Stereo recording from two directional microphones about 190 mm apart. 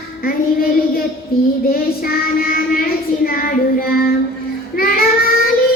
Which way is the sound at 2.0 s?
50° left (ahead or behind).